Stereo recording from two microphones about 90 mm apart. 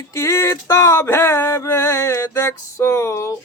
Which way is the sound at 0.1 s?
30° left (ahead or behind).